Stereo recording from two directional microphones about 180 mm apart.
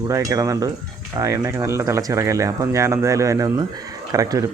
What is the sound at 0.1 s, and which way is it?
Speech, 20° right (ahead or behind).